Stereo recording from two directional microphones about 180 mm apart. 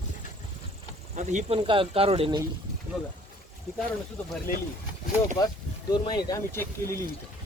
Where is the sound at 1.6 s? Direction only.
30° right (ahead or behind).